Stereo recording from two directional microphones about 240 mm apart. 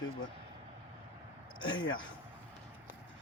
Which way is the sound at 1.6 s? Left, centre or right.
Centre.